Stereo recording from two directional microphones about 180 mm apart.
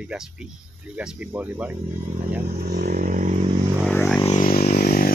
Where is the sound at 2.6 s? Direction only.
60° right (ahead or behind); by 3.4 s 45° right (ahead or behind).